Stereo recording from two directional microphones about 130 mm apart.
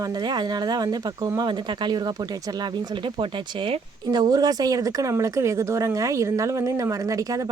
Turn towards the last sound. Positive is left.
turn(degrees=-25)  # may be behind; listen again after turning